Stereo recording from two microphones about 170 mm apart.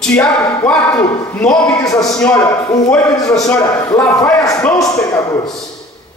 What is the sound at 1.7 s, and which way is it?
Speech, 20° left (ahead or behind).